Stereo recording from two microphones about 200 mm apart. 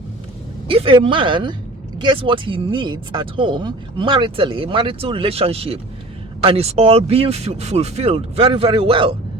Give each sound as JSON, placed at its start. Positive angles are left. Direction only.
{"t": 0.7, "sound": "speech", "side_deg": -25}